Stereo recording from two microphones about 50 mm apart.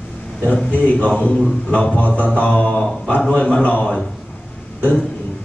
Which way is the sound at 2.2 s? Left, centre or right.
Left.